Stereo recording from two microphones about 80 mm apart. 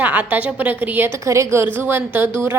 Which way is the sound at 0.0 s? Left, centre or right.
Centre.